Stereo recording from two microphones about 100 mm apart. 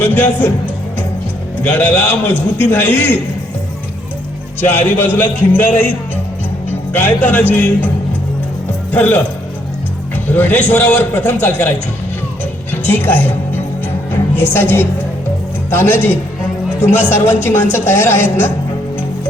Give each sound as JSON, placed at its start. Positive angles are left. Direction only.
{"t": 0.0, "sound": "a man's voice", "side_deg": 20}
{"t": 1.6, "sound": "a man's voice", "side_deg": 15}
{"t": 4.6, "sound": "a man's voice", "side_deg": 20}
{"t": 8.9, "sound": "speech", "side_deg": 20}
{"t": 10.2, "sound": "a man's voice", "side_deg": 20}
{"t": 12.7, "sound": "a woman's voice", "side_deg": 20}